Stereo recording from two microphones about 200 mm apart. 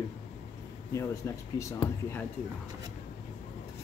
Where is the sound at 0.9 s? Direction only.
15° left (ahead or behind).